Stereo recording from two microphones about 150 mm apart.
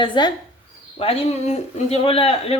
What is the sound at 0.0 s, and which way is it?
A man's voice, 30° left (ahead or behind).